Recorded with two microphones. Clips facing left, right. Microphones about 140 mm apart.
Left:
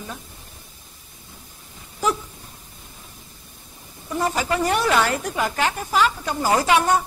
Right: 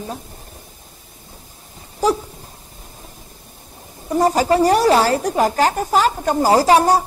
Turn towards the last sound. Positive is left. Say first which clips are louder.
# right 5 dB
turn(degrees=-35)  # may be behind; listen again after turning